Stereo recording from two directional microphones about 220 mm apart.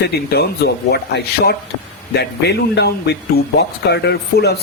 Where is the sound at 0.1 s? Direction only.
45° left (ahead or behind).